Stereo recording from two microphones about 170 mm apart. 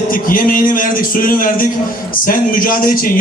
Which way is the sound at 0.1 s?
55° left (ahead or behind).